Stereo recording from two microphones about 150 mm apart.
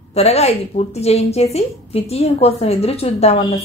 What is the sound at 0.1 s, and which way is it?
A woman's voice, 45° left (ahead or behind).